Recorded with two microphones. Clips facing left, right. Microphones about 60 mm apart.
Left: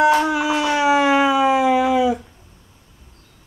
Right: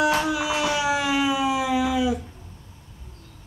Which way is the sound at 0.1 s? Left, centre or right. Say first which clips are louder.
Left 6 dB; left.